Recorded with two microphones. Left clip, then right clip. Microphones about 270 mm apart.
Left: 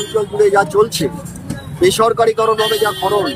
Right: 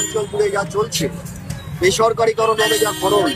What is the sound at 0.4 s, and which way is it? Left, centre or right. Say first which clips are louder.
Speech: left 8 dB; left.